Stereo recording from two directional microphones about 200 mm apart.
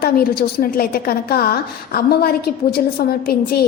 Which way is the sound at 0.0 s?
50° left (ahead or behind).